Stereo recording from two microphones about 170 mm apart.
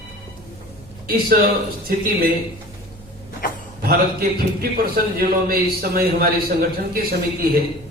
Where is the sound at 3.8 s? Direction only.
60° right (ahead or behind).